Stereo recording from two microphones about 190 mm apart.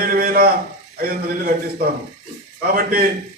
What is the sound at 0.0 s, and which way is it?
Speech, 50° right (ahead or behind).